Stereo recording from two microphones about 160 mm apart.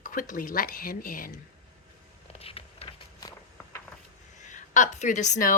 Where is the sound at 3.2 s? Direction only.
20° left (ahead or behind).